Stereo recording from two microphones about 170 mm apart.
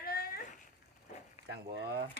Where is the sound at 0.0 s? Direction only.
65° left (ahead or behind).